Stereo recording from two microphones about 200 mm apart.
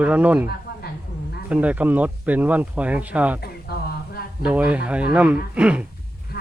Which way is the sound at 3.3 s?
50° left (ahead or behind).